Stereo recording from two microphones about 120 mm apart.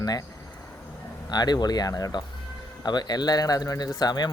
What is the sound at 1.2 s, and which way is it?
Speech, 35° left (ahead or behind).